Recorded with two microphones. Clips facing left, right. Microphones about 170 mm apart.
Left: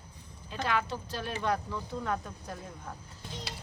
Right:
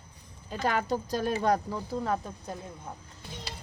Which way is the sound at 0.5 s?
45° right (ahead or behind).